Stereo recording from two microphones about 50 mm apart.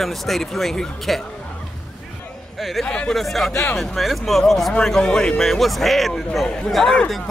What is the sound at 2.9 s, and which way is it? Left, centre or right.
Speech, centre.